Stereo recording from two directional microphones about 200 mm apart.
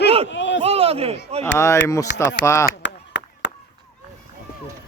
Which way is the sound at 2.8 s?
65° left (ahead or behind).